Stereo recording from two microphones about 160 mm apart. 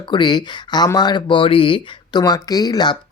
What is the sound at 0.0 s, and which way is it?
Speech, 30° left (ahead or behind).